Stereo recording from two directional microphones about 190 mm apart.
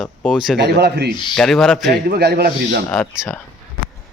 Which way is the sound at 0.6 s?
60° right (ahead or behind).